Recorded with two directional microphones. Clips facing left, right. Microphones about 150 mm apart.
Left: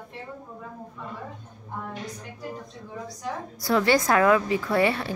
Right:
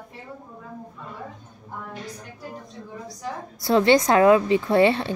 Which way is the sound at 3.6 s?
25° right (ahead or behind).